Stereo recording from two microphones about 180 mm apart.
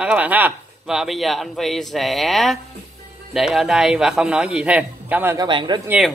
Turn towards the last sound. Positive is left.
turn(degrees=-25)  # may be behind; listen again after turning